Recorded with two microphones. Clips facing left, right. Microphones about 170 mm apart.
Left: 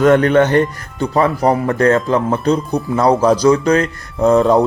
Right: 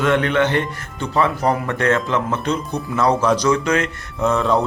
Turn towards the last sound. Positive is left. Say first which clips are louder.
# left 7 dB
turn(degrees=40)  # may be behind; listen again after turning